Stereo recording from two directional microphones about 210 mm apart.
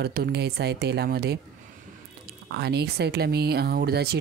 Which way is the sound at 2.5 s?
50° right (ahead or behind).